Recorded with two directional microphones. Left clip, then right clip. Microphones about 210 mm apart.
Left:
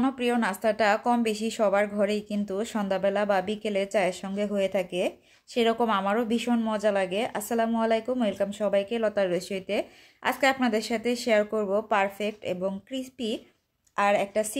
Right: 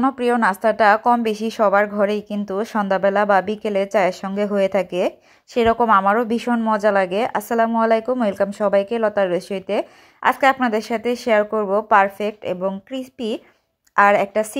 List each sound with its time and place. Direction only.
0.0 s a woman's voice: 15° right (ahead or behind)